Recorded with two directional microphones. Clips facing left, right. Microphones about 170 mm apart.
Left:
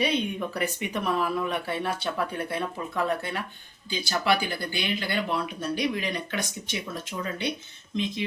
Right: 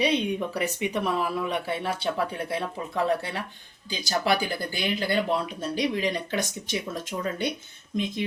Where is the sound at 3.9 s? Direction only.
40° right (ahead or behind).